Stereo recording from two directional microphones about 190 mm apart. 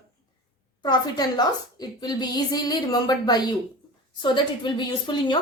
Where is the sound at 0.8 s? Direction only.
20° left (ahead or behind).